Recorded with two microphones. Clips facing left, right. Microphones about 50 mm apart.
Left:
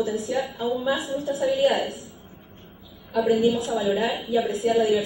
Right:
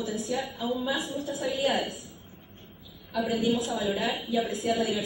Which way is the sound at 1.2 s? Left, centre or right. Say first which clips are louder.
Left 8 dB; left.